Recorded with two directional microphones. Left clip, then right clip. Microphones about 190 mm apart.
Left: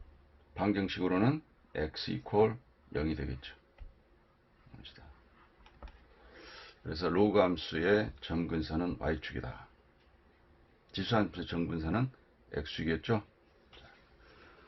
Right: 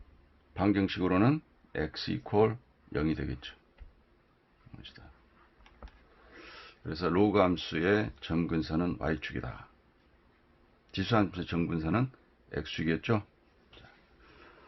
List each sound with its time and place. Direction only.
0.5 s speech: 45° right (ahead or behind)
6.4 s speech: 35° right (ahead or behind)
10.9 s speech: 40° right (ahead or behind)